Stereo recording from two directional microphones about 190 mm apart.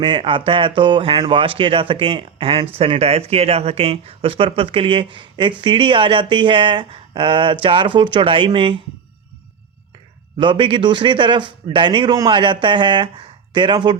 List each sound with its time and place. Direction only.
0.0 s speech: 25° right (ahead or behind)
10.3 s speech: 25° right (ahead or behind)